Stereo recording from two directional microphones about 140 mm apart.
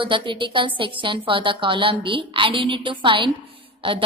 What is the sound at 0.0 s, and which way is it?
A woman's voice, 35° right (ahead or behind).